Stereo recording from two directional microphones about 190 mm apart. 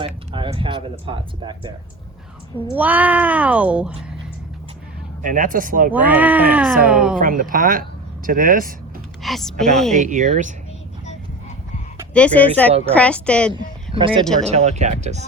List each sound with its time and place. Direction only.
0.3 s speech: 25° right (ahead or behind)
2.7 s speech: 10° right (ahead or behind)
5.2 s speech: 45° right (ahead or behind)
5.9 s speech: 10° right (ahead or behind)
7.2 s speech: 45° right (ahead or behind)
9.2 s speech: centre (ahead or behind)
9.9 s speech: 40° right (ahead or behind)
12.1 s speech: 5° left (ahead or behind)
13.5 s speech: 25° right (ahead or behind)